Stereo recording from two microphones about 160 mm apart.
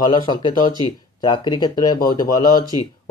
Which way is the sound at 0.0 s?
25° left (ahead or behind).